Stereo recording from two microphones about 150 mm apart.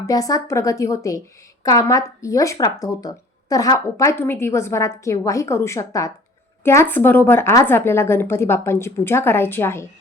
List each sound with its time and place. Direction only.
0.0 s a woman's voice: 25° left (ahead or behind)